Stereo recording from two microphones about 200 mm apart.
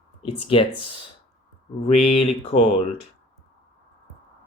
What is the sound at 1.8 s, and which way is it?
Speech, 30° left (ahead or behind).